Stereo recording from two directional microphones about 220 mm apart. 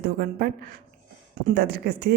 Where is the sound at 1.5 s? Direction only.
45° right (ahead or behind).